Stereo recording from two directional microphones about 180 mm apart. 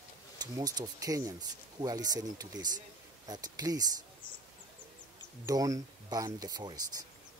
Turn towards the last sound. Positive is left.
turn(degrees=-20)  # may be behind; listen again after turning